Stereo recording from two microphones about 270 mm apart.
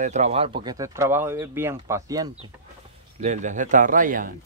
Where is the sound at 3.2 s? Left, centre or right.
Right.